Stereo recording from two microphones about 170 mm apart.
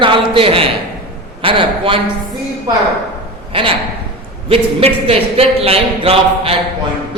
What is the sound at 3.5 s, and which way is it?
Speech, 30° right (ahead or behind).